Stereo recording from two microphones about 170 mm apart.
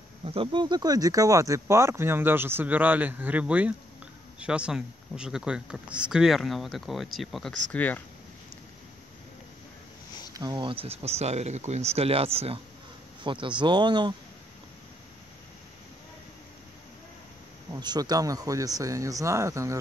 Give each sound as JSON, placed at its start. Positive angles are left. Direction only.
{"t": 0.2, "sound": "speech", "side_deg": -35}
{"t": 10.3, "sound": "speech", "side_deg": -25}
{"t": 17.7, "sound": "speech", "side_deg": -25}